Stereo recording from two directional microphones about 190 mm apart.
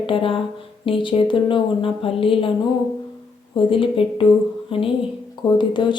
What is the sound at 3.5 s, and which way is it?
Speech, 25° left (ahead or behind).